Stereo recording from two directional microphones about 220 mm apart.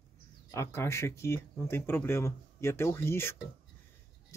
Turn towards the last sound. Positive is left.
turn(degrees=10)  # may be behind; listen again after turning